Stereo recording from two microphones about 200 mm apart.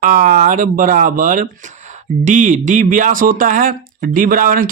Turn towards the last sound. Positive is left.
turn(degrees=-45)  # may be behind; listen again after turning